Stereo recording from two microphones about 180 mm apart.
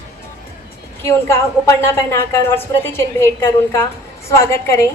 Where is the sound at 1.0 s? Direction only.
15° left (ahead or behind).